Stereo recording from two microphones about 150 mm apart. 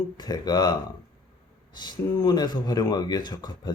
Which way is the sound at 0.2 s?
25° left (ahead or behind).